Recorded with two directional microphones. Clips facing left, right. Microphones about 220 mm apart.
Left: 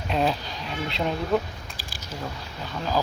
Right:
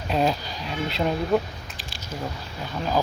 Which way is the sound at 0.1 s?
Centre (ahead or behind).